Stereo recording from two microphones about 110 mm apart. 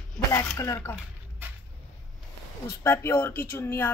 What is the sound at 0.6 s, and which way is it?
Speech, 25° left (ahead or behind).